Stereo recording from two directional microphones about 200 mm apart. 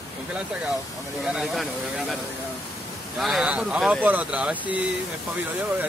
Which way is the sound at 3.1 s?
Centre (ahead or behind).